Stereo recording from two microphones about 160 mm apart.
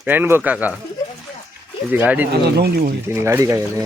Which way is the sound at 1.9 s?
10° right (ahead or behind).